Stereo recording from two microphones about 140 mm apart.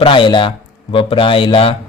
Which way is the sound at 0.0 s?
35° left (ahead or behind).